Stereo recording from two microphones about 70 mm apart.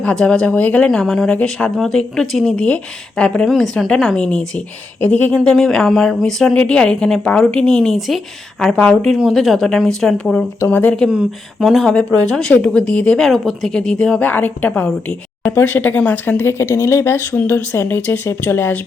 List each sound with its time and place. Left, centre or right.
0.0 s speech: centre
0.9 s speech: centre
1.3 s speech: centre
1.7 s speech: centre
2.6 s speech: centre
3.4 s speech: centre
8.8 s speech: centre
9.1 s speech: centre
10.7 s a woman's voice: left
11.6 s speech: centre
11.9 s speech: centre
13.1 s speech: centre
14.2 s a woman's voice: left